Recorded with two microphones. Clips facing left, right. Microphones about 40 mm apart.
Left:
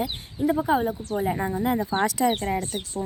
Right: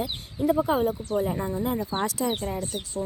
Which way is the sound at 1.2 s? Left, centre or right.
Left.